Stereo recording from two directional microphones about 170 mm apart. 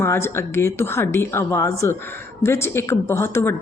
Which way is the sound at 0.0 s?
15° left (ahead or behind).